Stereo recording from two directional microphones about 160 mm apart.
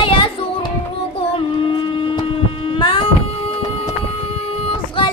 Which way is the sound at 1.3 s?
35° left (ahead or behind).